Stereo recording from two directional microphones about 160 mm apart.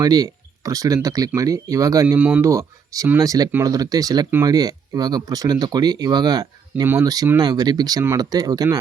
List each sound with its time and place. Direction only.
0.0 s speech: 20° right (ahead or behind)
2.1 s speech: 10° right (ahead or behind)